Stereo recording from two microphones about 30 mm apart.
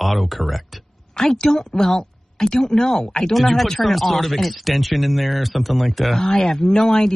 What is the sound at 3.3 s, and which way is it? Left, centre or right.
Speech, centre.